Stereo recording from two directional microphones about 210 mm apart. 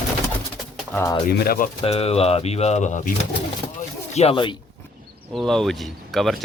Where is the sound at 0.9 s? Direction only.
15° left (ahead or behind).